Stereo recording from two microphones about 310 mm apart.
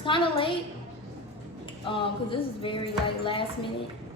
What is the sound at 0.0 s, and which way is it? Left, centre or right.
Speech, centre.